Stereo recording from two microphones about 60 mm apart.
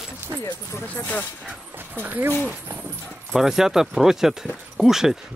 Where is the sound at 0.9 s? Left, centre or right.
Left.